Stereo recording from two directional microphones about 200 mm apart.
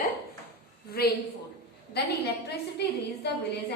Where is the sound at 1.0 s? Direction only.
50° left (ahead or behind).